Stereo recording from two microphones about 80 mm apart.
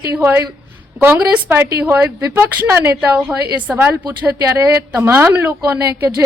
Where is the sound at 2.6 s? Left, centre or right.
Right.